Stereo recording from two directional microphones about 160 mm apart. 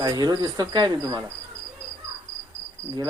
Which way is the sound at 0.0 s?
25° right (ahead or behind).